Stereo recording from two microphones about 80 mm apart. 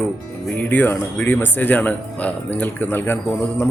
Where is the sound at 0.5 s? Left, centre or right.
Left.